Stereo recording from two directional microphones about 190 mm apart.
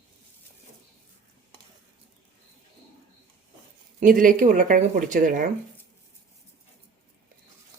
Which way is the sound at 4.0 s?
45° right (ahead or behind).